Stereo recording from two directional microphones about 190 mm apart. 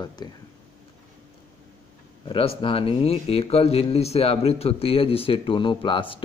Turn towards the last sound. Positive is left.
turn(degrees=25)  # may be behind; listen again after turning